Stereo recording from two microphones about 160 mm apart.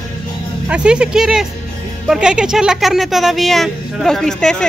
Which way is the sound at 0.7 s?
5° right (ahead or behind).